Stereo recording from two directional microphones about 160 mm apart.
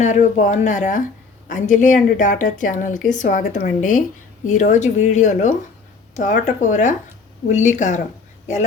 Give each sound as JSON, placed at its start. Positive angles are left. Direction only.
{"t": 0.0, "sound": "speech", "side_deg": 50}